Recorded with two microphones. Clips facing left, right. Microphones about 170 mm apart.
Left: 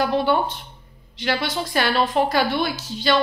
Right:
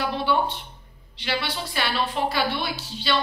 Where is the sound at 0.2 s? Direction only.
45° left (ahead or behind).